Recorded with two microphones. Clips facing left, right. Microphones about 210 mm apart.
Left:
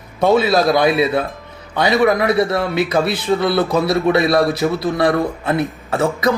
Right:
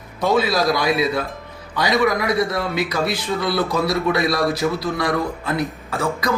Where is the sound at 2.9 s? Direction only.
55° left (ahead or behind).